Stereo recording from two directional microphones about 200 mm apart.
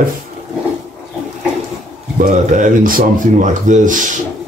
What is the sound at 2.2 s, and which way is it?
Speech, 40° right (ahead or behind).